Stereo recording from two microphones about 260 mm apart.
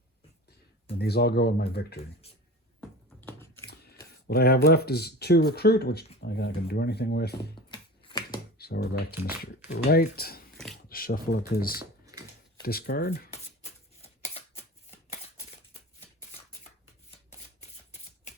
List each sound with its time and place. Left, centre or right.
0.9 s speech: left
3.2 s biting: centre
4.3 s speech: left
7.7 s a sound: centre
8.5 s speech: left
14.0 s shuffling cards: left
15.7 s a sound: left